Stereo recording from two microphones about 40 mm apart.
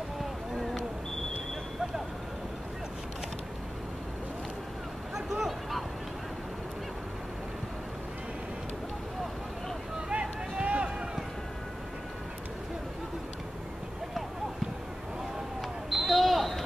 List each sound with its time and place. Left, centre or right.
5.1 s vehicle: centre
9.9 s vehicle: right
10.6 s run: right
15.9 s a sound: centre